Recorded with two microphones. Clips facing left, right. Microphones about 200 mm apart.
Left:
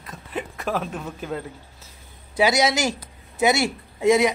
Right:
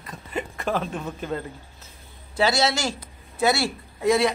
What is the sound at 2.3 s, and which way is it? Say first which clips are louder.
Speech: left 2 dB; 15° left (ahead or behind).